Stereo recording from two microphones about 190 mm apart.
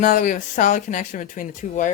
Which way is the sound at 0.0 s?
40° left (ahead or behind).